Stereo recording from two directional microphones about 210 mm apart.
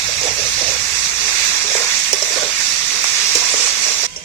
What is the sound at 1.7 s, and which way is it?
Frying, 10° left (ahead or behind).